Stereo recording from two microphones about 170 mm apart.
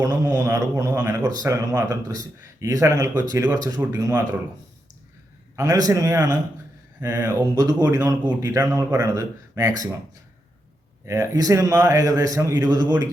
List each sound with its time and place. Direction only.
0.0 s a man's voice: 20° right (ahead or behind)
5.5 s speech: 20° right (ahead or behind)
11.0 s speech: 20° right (ahead or behind)